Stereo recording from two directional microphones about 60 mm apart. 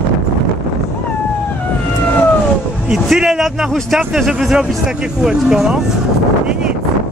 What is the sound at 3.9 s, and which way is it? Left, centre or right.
Speech, centre.